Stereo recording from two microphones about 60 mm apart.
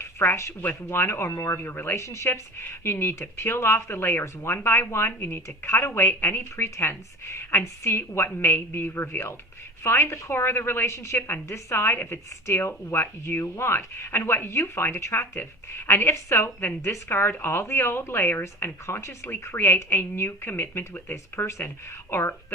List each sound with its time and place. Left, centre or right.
0.0 s a woman's voice: left
2.0 s a woman's voice: left
19.5 s a woman's voice: left